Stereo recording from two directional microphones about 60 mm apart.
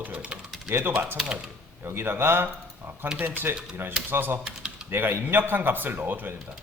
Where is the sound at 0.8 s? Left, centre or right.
Right.